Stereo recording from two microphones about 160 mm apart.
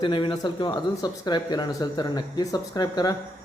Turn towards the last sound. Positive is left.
turn(degrees=25)  # may be behind; listen again after turning